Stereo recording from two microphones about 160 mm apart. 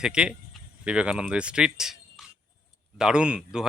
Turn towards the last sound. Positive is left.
turn(degrees=-5)  # may be behind; listen again after turning